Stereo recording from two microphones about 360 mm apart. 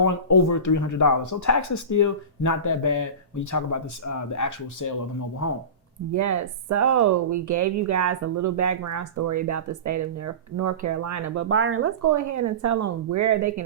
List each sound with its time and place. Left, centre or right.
0.0 s speech: left
6.1 s speech: right
11.4 s speech: right
12.0 s speech: right